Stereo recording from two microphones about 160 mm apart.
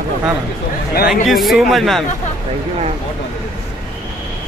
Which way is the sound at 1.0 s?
Centre (ahead or behind).